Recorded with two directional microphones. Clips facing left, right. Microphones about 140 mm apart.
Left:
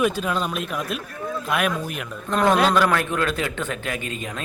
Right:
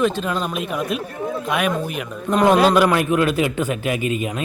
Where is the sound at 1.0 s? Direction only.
25° right (ahead or behind).